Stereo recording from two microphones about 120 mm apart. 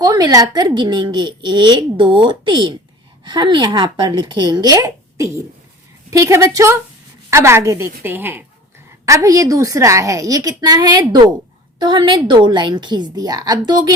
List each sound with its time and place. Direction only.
0.0 s a woman's voice: 35° right (ahead or behind)